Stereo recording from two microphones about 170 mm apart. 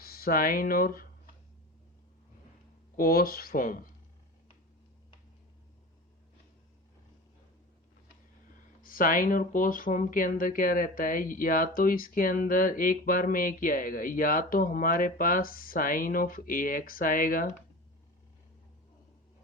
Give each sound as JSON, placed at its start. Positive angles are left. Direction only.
{"t": 0.0, "sound": "speech", "side_deg": 60}
{"t": 2.9, "sound": "speech", "side_deg": 60}
{"t": 8.8, "sound": "speech", "side_deg": 55}